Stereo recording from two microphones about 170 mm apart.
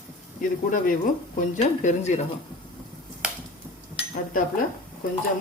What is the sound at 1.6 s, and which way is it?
Speech, 40° left (ahead or behind).